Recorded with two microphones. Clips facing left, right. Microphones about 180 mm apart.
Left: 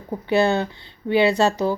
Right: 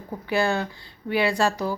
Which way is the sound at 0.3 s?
20° left (ahead or behind).